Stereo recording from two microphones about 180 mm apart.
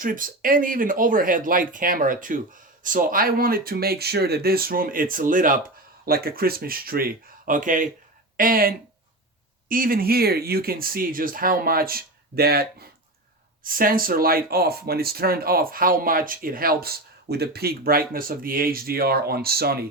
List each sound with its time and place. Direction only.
0.0 s speech: 50° right (ahead or behind)